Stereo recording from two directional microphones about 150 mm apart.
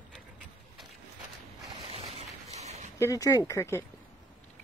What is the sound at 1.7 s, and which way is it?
Boat, 40° right (ahead or behind).